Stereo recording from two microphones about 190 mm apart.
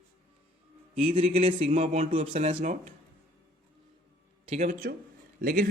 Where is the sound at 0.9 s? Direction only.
30° right (ahead or behind).